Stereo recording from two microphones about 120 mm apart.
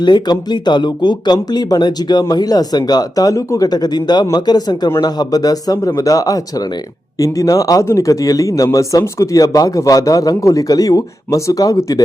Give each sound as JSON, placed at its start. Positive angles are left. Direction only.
{"t": 0.0, "sound": "speech", "side_deg": 35}